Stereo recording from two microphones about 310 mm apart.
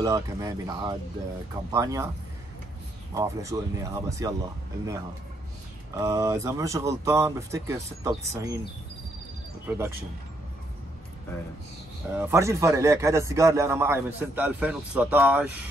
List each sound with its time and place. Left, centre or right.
0.0 s a man's voice: centre
3.2 s a man's voice: centre
5.9 s a man's voice: centre
9.7 s speech: centre
12.1 s a man's voice: centre